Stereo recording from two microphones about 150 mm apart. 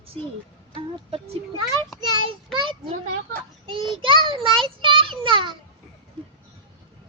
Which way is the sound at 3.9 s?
35° right (ahead or behind).